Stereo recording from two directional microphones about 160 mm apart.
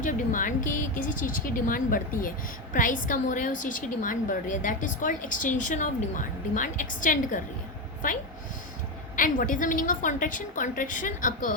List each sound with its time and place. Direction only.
0.0 s a woman's voice: 55° left (ahead or behind)
9.1 s a woman's voice: 60° left (ahead or behind)